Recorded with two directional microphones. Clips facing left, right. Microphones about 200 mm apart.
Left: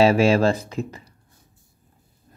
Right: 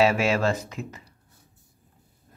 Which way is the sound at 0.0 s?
30° left (ahead or behind).